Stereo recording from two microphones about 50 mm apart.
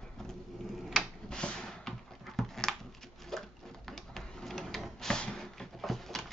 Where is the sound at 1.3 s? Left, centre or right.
Centre.